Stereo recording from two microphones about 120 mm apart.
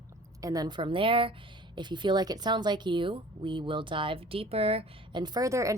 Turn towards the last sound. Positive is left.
turn(degrees=-25)  # may be behind; listen again after turning